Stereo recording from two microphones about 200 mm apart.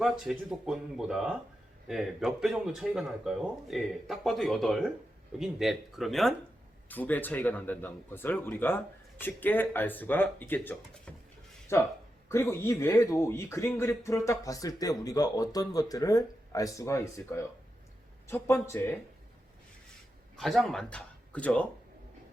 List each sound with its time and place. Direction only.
0.0 s speech: centre (ahead or behind)
20.3 s speech: centre (ahead or behind)